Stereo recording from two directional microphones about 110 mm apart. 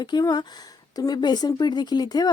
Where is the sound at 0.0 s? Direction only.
40° left (ahead or behind).